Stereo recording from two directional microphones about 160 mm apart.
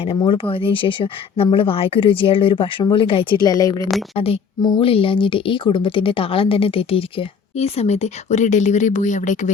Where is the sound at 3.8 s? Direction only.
Centre (ahead or behind).